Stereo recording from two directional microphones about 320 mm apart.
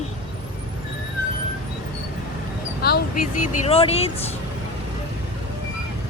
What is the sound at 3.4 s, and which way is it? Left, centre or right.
Speech, centre.